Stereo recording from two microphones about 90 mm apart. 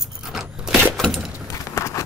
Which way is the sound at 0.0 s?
5° right (ahead or behind).